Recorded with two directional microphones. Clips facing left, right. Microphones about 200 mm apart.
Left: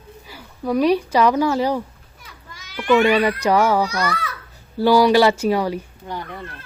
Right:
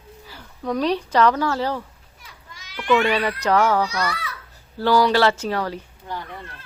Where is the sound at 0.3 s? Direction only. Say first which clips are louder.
Left 3 dB; 10° left (ahead or behind).